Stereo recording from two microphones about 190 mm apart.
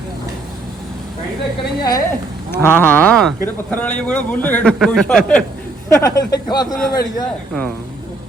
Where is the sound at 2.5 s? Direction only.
10° left (ahead or behind).